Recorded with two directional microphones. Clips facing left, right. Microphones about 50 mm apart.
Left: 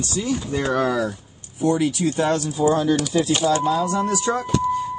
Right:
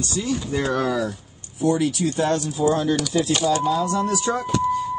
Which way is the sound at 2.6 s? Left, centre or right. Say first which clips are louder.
Left 2 dB; left.